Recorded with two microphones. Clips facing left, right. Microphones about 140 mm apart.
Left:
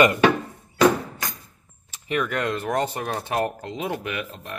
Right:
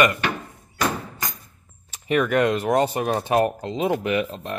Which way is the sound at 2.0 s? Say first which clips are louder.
Right 6 dB; 20° right (ahead or behind).